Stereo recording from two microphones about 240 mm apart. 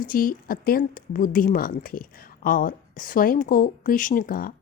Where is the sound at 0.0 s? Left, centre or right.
Left.